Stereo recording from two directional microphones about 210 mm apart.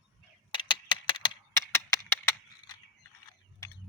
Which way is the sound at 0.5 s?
25° left (ahead or behind).